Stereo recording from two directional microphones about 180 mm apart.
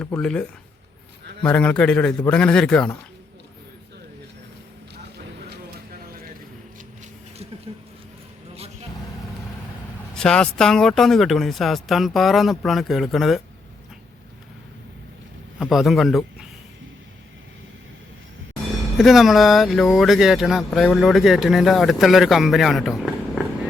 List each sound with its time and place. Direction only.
0.2 s speech: 5° left (ahead or behind)
1.5 s speech: 5° left (ahead or behind)
7.7 s a sound: 25° right (ahead or behind)
10.2 s speech: 5° left (ahead or behind)
15.5 s a man's voice: centre (ahead or behind)
18.9 s speech: centre (ahead or behind)